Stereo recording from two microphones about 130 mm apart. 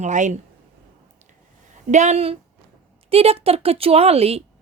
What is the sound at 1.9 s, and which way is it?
A woman's voice, 60° right (ahead or behind).